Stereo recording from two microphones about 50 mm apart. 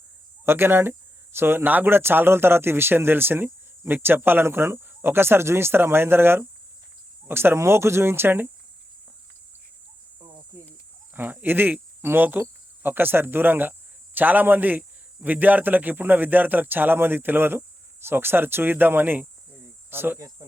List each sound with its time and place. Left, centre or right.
0.4 s speech: right
1.6 s speech: right
4.4 s speech: right
10.2 s cricket: right
11.1 s speech: right
19.5 s cricket: right